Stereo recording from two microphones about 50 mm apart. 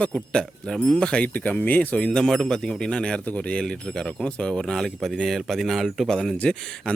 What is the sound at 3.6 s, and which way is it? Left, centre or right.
Speech, centre.